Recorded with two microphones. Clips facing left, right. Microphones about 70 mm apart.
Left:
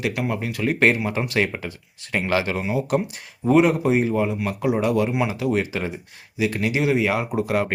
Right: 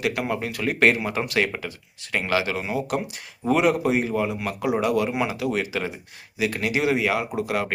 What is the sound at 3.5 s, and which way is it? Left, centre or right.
A man's voice, left.